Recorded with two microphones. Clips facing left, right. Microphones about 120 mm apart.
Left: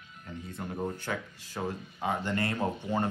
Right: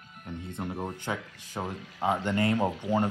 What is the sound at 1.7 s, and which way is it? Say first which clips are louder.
Speech: left 1 dB; 90° right.